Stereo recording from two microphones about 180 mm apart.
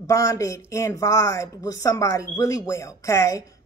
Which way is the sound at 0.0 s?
15° left (ahead or behind).